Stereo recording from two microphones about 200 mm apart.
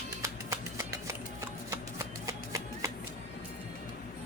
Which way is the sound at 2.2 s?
15° right (ahead or behind).